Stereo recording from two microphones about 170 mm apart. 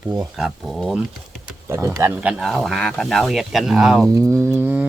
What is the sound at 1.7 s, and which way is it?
Speech, 15° right (ahead or behind).